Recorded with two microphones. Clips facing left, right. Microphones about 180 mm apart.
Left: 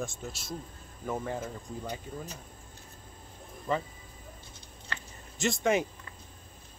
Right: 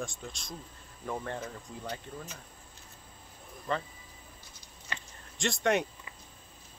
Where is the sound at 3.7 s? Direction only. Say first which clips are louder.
Left 2 dB; 10° left (ahead or behind).